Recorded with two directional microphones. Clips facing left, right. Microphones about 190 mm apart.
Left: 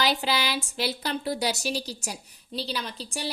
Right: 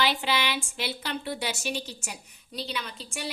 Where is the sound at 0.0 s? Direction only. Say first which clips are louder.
Left 1 dB; 40° left (ahead or behind).